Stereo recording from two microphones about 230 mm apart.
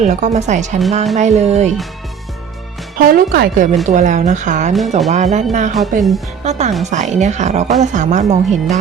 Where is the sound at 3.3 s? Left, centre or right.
Right.